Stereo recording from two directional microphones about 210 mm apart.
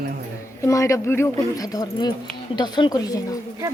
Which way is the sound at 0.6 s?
15° left (ahead or behind).